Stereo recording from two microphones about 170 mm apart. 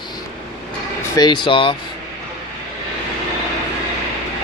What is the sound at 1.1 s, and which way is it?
Speech, 25° left (ahead or behind).